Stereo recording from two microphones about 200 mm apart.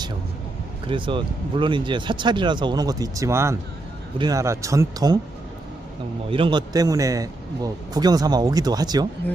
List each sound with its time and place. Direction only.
0.9 s speech: 25° right (ahead or behind)
6.3 s speech: 25° right (ahead or behind)